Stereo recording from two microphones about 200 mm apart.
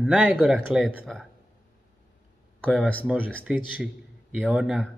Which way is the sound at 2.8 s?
5° left (ahead or behind).